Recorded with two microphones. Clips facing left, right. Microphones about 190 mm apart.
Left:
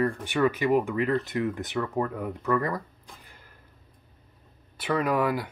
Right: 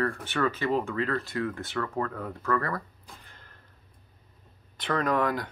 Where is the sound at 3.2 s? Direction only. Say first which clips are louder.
Left 1 dB; 10° left (ahead or behind).